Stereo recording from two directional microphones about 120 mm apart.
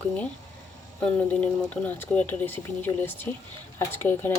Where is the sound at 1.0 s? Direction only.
10° left (ahead or behind).